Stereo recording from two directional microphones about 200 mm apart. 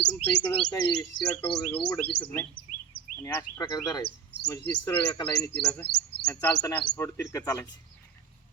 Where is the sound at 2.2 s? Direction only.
90° left.